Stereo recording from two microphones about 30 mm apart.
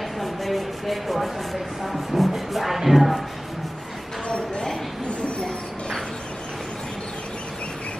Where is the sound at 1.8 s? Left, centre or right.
Centre.